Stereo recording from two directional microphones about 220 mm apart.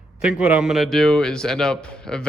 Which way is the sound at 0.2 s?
5° right (ahead or behind).